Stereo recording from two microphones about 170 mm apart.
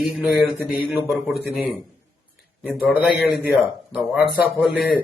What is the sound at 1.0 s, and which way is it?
A man's voice, centre (ahead or behind).